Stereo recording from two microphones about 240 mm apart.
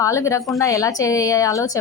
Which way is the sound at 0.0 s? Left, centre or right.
Centre.